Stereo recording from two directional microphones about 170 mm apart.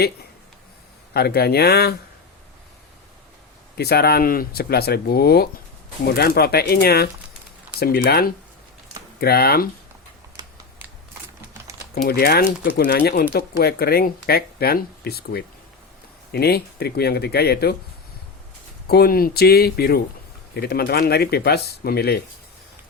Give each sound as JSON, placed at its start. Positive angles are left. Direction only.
{"t": 1.1, "sound": "speech", "side_deg": 70}
{"t": 3.8, "sound": "speech", "side_deg": 70}
{"t": 12.0, "sound": "speech", "side_deg": 65}
{"t": 18.9, "sound": "speech", "side_deg": 65}